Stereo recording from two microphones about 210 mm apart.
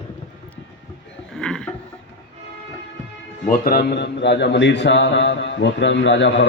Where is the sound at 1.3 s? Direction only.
5° left (ahead or behind).